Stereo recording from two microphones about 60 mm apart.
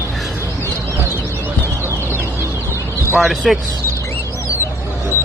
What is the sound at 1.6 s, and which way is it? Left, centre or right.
Bird, right.